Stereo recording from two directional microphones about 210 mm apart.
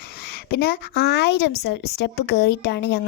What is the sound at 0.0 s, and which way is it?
A woman's voice, 50° left (ahead or behind).